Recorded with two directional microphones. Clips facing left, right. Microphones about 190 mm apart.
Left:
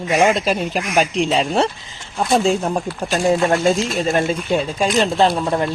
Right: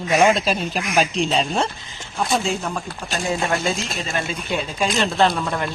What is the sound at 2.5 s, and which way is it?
Speech, 35° left (ahead or behind).